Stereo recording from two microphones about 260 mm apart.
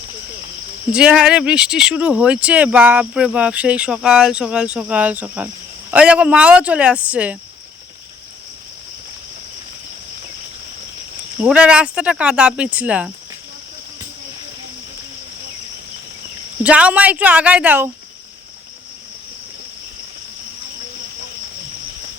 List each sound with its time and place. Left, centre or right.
0.9 s speech: centre
11.3 s speech: centre
16.6 s speech: centre